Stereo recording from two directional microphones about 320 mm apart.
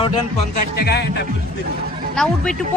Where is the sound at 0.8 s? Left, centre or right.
Left.